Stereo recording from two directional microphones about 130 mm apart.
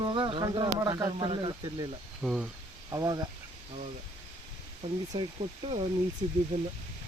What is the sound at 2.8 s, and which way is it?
Speech, 30° right (ahead or behind).